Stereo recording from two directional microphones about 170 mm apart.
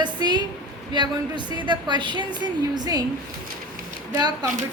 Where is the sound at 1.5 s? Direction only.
25° right (ahead or behind).